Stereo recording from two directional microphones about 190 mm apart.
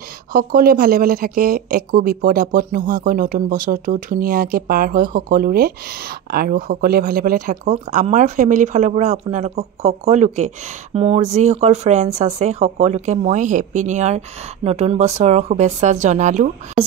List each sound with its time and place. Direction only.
0.3 s speech: 50° right (ahead or behind)